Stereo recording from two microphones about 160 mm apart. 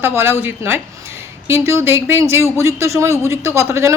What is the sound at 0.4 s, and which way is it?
Speech, 15° right (ahead or behind).